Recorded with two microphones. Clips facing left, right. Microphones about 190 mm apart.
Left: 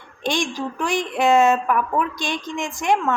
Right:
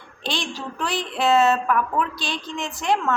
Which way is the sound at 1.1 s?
15° left (ahead or behind).